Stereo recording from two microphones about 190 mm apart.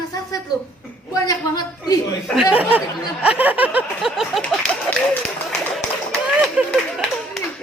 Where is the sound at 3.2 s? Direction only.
10° right (ahead or behind).